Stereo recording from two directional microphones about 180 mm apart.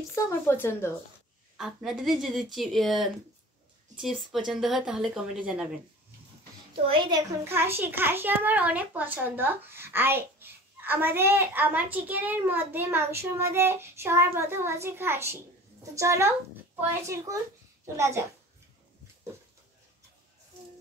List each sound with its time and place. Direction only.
0.1 s speech: 15° left (ahead or behind)
1.6 s a woman's voice: centre (ahead or behind)
4.0 s a woman's voice: centre (ahead or behind)
6.9 s a child's voice: 25° right (ahead or behind)
17.8 s a child's voice: 15° right (ahead or behind)